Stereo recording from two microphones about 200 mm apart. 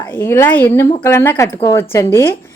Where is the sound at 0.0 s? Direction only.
10° left (ahead or behind).